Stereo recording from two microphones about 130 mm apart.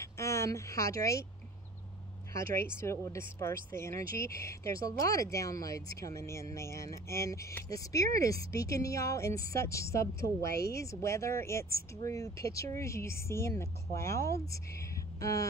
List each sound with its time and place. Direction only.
0.0 s speech: 20° left (ahead or behind)
2.3 s speech: 20° left (ahead or behind)
14.5 s a sound: 25° left (ahead or behind)